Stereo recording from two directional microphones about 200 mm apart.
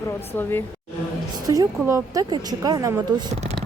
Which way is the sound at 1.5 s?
15° right (ahead or behind).